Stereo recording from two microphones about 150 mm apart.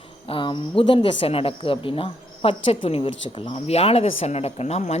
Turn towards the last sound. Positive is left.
turn(degrees=45)  # may be behind; listen again after turning